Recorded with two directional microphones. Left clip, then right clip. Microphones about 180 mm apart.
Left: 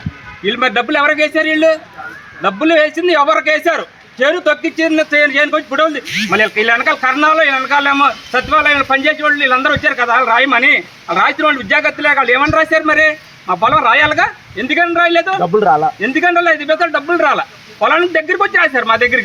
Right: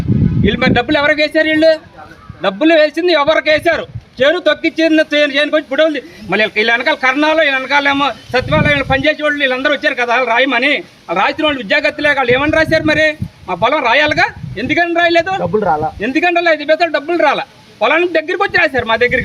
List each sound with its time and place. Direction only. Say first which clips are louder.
0.4 s a man's voice: even; 25° right (ahead or behind)
15.4 s a man's voice: left 3 dB; 25° left (ahead or behind)
16.0 s a man's voice: left 1 dB; 30° right (ahead or behind)